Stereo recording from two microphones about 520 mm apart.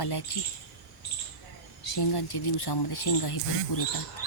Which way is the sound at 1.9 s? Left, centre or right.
Left.